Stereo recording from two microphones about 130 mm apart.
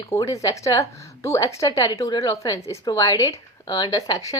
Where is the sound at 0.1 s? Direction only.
30° left (ahead or behind).